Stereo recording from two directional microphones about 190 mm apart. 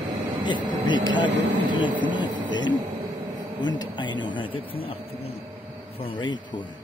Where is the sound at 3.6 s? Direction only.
25° left (ahead or behind).